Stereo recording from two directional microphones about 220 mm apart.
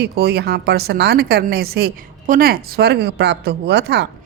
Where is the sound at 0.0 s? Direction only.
45° right (ahead or behind).